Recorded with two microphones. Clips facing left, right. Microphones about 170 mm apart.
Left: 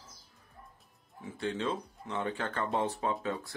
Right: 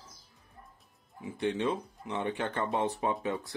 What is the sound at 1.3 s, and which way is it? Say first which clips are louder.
Speech: right 3 dB; 20° right (ahead or behind).